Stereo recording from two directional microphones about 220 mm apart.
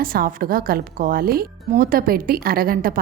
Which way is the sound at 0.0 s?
40° right (ahead or behind).